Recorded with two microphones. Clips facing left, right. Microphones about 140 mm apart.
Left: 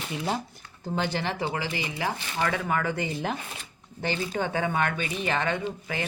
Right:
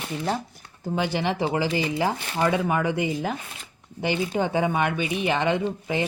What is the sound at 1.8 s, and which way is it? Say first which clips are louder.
Speech: right 6 dB; 30° right (ahead or behind).